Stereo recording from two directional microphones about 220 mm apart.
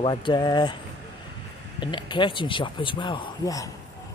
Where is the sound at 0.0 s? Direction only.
20° left (ahead or behind).